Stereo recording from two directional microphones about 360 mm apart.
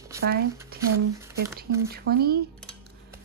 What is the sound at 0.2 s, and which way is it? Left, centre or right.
Speech, right.